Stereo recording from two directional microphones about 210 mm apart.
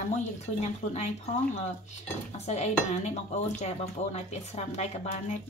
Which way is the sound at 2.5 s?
30° left (ahead or behind).